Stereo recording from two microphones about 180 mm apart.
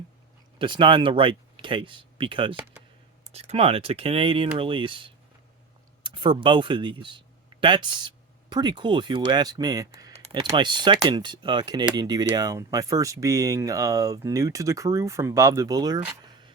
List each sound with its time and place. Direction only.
0.6 s speech: 25° right (ahead or behind)
10.1 s speech: 35° right (ahead or behind)